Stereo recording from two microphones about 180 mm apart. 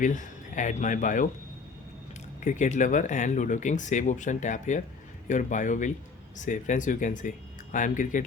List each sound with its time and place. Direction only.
0.0 s speech: 45° left (ahead or behind)
2.4 s speech: 45° left (ahead or behind)